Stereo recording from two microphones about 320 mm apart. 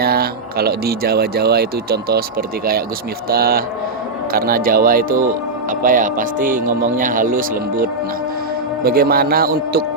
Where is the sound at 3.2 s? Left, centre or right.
Right.